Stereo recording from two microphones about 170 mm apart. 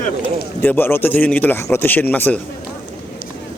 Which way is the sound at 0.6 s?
10° left (ahead or behind).